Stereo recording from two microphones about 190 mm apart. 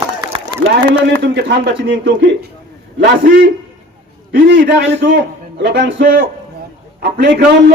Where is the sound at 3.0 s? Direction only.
60° right (ahead or behind).